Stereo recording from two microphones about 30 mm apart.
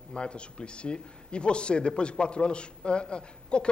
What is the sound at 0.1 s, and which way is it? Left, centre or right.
A man's voice, left.